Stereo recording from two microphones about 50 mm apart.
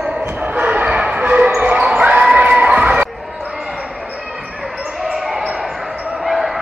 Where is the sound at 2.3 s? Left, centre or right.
Right.